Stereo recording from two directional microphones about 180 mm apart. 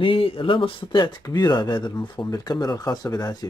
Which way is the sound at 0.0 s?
30° left (ahead or behind).